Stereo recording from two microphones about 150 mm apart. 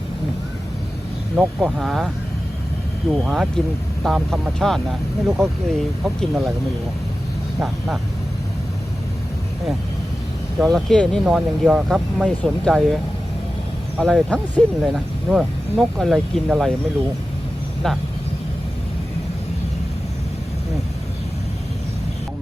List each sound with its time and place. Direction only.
1.4 s speech: centre (ahead or behind)
3.2 s speech: 5° right (ahead or behind)
10.6 s speech: centre (ahead or behind)
14.0 s speech: centre (ahead or behind)
17.8 s speech: 5° left (ahead or behind)